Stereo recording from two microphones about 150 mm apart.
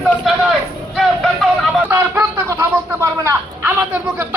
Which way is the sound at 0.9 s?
Centre (ahead or behind).